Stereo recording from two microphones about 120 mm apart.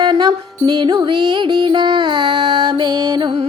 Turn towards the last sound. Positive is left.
turn(degrees=-45)  # may be behind; listen again after turning